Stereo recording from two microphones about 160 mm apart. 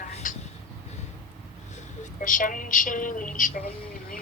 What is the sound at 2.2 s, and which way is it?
A woman's voice, 55° left (ahead or behind).